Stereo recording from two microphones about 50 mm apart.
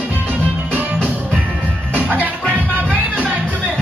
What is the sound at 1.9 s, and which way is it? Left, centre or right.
Music, right.